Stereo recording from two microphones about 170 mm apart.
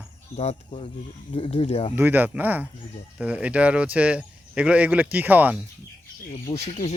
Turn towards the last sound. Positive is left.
turn(degrees=40)  # may be behind; listen again after turning